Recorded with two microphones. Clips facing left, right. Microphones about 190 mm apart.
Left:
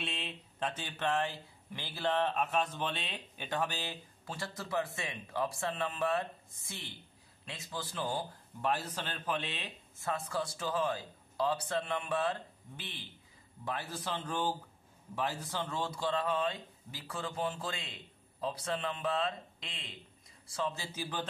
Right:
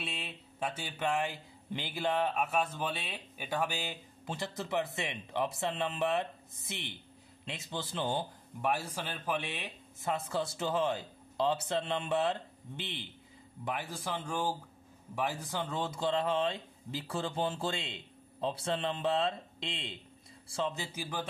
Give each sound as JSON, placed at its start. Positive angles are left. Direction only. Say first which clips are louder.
{"t": 0.0, "sound": "a sound", "louder": "left 1 dB", "side_deg": 0}
{"t": 1.7, "sound": "a man's voice", "louder": "right 1 dB", "side_deg": -20}
{"t": 8.5, "sound": "a man's voice", "louder": "right 1 dB", "side_deg": -10}